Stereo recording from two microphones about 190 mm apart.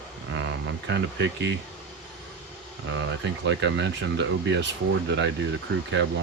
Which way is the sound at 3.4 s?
70° right (ahead or behind).